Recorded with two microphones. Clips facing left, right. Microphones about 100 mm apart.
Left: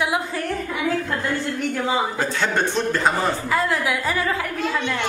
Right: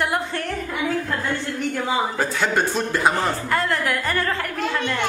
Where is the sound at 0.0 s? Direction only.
5° left (ahead or behind).